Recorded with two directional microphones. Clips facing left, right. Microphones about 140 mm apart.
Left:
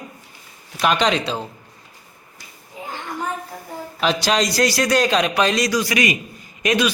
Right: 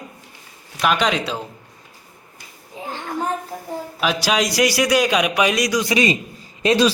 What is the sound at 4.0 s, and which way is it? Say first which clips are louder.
A man's voice: left 1 dB; 5° right (ahead or behind).